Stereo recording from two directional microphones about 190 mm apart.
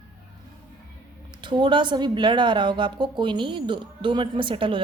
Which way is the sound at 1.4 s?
25° right (ahead or behind).